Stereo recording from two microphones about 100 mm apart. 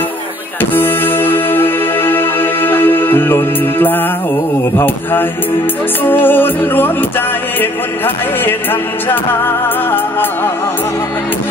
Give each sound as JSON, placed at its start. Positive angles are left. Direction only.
{"t": 0.6, "sound": "music", "side_deg": 20}